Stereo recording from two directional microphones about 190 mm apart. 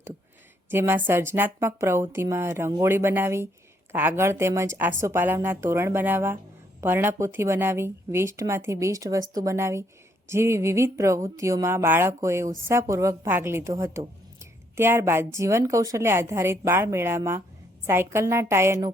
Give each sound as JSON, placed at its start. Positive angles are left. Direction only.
{"t": 0.7, "sound": "speech", "side_deg": -10}